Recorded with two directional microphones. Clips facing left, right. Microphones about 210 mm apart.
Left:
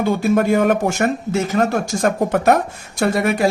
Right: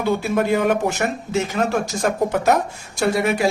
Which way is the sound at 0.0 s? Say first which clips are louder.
Left 3 dB; 50° left (ahead or behind).